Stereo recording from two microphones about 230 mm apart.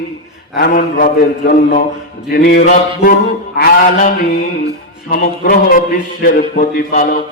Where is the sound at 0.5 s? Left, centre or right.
Left.